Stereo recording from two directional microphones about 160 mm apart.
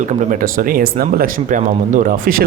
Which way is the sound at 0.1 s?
60° right (ahead or behind).